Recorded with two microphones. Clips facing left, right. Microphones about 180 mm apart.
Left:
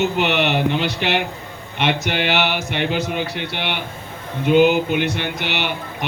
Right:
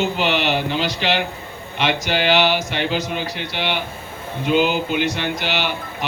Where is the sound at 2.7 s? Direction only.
60° left (ahead or behind).